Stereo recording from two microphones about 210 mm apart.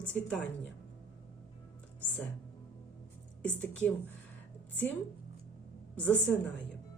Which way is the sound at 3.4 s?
5° left (ahead or behind).